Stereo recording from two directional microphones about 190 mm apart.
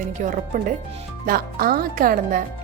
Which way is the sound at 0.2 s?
45° right (ahead or behind).